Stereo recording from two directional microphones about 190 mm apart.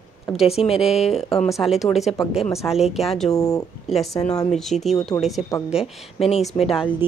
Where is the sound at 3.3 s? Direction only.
20° left (ahead or behind).